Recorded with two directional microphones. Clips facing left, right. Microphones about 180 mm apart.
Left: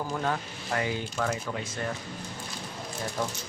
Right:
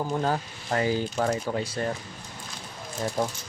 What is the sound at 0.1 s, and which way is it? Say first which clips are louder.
Speech: right 3 dB; 30° right (ahead or behind).